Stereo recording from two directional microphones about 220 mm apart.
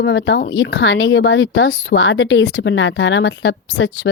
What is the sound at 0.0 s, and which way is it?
Speech, 55° left (ahead or behind).